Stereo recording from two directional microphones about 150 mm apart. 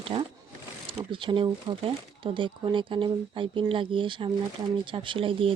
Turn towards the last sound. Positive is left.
turn(degrees=-35)  # may be behind; listen again after turning